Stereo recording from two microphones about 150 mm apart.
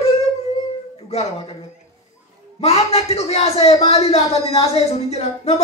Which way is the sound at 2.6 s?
45° left (ahead or behind).